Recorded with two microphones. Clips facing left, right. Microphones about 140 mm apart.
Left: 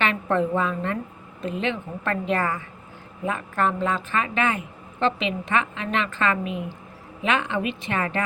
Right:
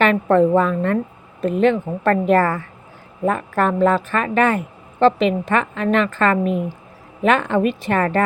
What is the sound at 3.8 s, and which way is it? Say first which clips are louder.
A woman's voice: right 8 dB; 50° right (ahead or behind).